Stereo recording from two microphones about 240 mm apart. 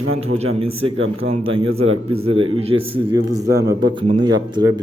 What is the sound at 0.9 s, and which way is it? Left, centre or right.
Speech, right.